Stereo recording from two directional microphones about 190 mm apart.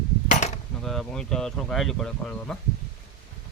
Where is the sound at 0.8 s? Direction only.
Centre (ahead or behind).